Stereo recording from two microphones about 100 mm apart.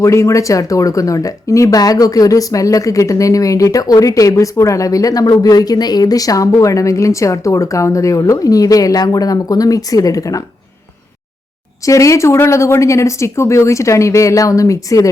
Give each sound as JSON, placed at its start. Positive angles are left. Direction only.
{"t": 0.0, "sound": "speech", "side_deg": 30}
{"t": 11.9, "sound": "speech", "side_deg": 30}